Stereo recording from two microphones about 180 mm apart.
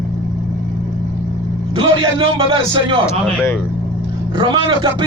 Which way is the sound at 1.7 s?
30° right (ahead or behind).